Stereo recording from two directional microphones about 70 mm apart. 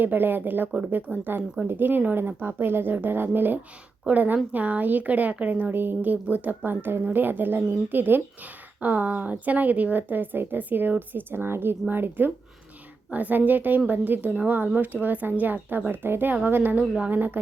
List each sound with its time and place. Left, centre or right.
0.0 s a woman's voice: right